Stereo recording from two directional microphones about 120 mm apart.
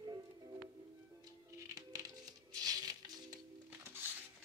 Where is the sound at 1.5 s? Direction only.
30° right (ahead or behind).